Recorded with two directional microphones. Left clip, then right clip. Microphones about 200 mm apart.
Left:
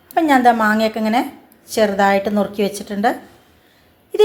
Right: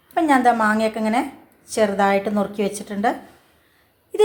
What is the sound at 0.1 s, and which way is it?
Speech, 10° left (ahead or behind).